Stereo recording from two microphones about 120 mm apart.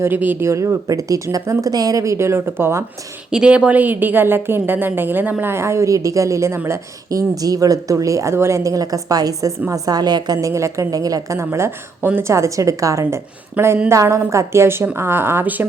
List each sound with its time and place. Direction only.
0.0 s a woman's voice: 15° right (ahead or behind)
3.3 s a woman's voice: 5° right (ahead or behind)